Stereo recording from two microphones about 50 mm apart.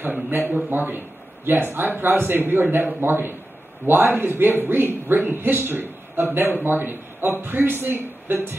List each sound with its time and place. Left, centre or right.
0.0 s a man's voice: right